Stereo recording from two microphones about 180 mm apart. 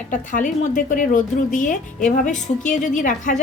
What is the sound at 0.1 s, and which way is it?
A woman's voice, 45° left (ahead or behind).